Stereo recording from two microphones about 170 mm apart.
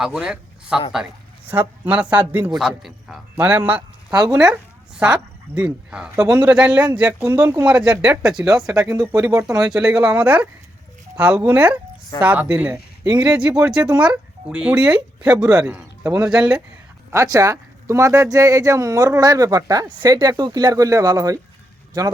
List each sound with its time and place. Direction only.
0.0 s speech: 5° right (ahead or behind)
8.9 s speech: 20° right (ahead or behind)
9.6 s speech: 5° right (ahead or behind)
17.1 s speech: 20° right (ahead or behind)